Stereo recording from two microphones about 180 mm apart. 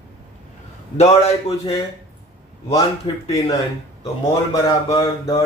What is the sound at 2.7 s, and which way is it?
Mantra, 20° left (ahead or behind).